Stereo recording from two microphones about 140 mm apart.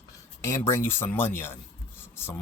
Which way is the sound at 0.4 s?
20° left (ahead or behind).